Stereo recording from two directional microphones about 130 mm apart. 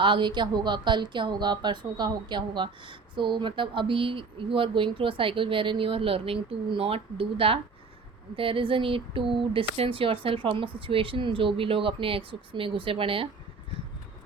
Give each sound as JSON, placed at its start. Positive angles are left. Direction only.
{"t": 0.0, "sound": "a woman's voice", "side_deg": -40}